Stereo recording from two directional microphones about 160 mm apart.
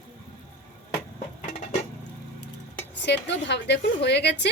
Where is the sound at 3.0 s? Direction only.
90° left.